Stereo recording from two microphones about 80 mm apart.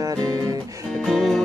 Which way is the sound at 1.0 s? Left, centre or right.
Centre.